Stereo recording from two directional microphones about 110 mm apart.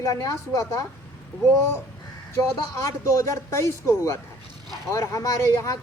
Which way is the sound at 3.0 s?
25° left (ahead or behind).